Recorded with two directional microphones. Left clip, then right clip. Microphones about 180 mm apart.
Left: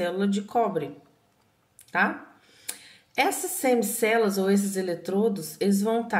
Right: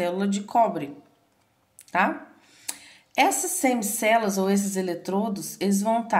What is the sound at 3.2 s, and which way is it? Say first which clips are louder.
Speech: right 3 dB; 35° right (ahead or behind).